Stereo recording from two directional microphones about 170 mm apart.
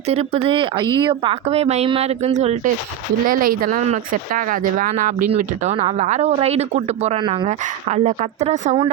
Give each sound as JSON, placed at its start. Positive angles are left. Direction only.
{"t": 0.1, "sound": "speech", "side_deg": -35}
{"t": 3.2, "sound": "speech", "side_deg": -55}
{"t": 5.3, "sound": "speech", "side_deg": -40}
{"t": 7.2, "sound": "speech", "side_deg": -30}
{"t": 7.4, "sound": "speech", "side_deg": -40}